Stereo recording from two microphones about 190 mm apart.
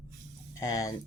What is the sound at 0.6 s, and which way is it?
Speech, 15° left (ahead or behind).